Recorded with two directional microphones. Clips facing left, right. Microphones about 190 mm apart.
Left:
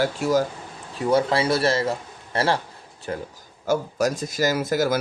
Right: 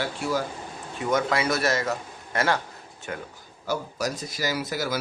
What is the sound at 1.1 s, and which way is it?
A man's voice, 30° left (ahead or behind).